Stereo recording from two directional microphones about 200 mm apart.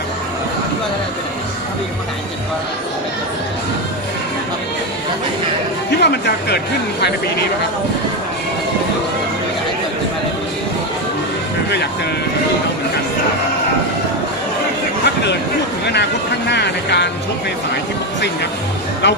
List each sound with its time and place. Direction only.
5.9 s speech: 55° left (ahead or behind)
15.9 s speech: 55° left (ahead or behind)
19.0 s speech: 60° left (ahead or behind)